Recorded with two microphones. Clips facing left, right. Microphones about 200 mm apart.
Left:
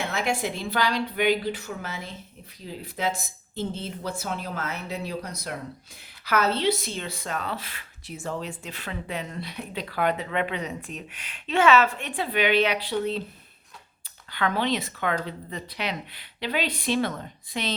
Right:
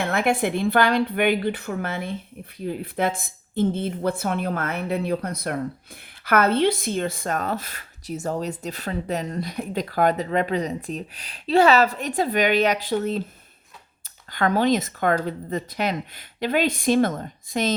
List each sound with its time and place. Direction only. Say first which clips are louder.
0.1 s a woman's voice: right 6 dB; 55° right (ahead or behind)
14.3 s speech: right 6 dB; 45° right (ahead or behind)